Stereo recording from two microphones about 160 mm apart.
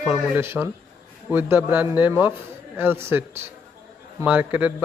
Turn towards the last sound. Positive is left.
turn(degrees=-10)  # may be behind; listen again after turning